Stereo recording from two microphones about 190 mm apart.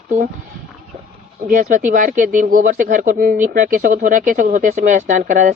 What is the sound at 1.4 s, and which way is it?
Speech, 45° right (ahead or behind).